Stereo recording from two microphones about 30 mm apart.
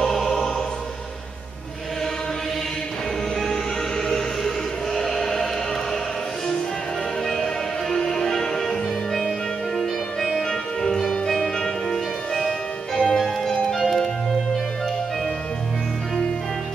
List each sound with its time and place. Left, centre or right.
0.0 s music: centre
4.1 s music: centre
7.2 s music: centre
13.5 s music: centre